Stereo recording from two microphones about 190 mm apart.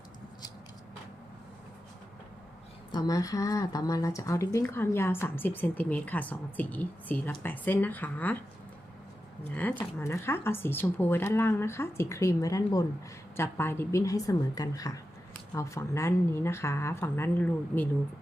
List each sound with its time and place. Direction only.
2.9 s speech: 20° left (ahead or behind)
9.6 s speech: 10° left (ahead or behind)